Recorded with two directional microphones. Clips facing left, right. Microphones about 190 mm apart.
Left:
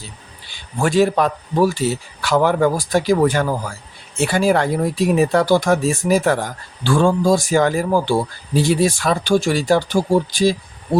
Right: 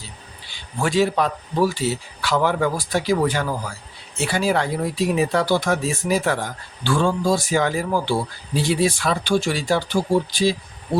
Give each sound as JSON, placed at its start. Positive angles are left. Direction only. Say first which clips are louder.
{"t": 0.8, "sound": "speech", "louder": "left 4 dB", "side_deg": 50}